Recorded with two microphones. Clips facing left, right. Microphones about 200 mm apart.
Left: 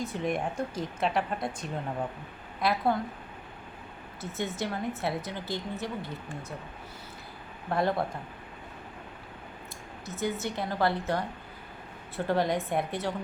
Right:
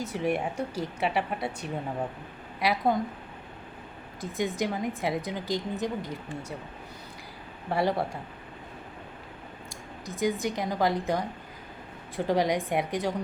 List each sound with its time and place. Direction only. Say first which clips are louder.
0.1 s a woman's voice: right 2 dB; 10° right (ahead or behind)
0.5 s speech: right 1 dB; 70° right (ahead or behind)
1.0 s a woman's voice: even; 10° right (ahead or behind)
2.6 s a woman's voice: right 1 dB; 10° right (ahead or behind)
4.2 s a woman's voice: right 4 dB; 15° right (ahead or behind)
7.7 s a woman's voice: right 1 dB; 10° right (ahead or behind)
10.1 s a woman's voice: right 4 dB; 15° right (ahead or behind)